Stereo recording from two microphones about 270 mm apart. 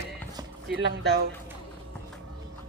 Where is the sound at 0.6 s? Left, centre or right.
Right.